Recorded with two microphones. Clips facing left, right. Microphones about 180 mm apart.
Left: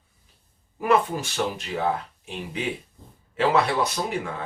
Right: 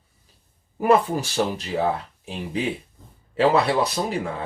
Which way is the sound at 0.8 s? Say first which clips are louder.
Right 3 dB; 35° right (ahead or behind).